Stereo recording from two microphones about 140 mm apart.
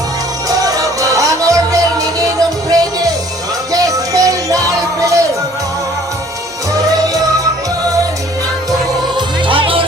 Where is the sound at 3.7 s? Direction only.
25° right (ahead or behind).